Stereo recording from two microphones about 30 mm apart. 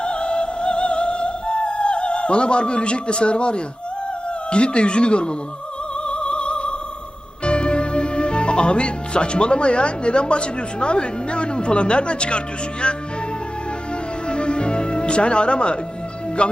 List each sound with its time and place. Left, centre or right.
0.0 s music: left
4.5 s speech: left
6.1 s opera: left
7.4 s speech: left
14.3 s music: left
16.4 s speech: left